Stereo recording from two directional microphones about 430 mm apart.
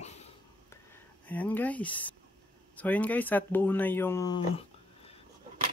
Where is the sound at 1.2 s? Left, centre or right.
Centre.